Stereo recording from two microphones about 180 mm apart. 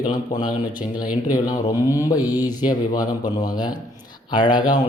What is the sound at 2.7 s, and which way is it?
Speech, 20° left (ahead or behind).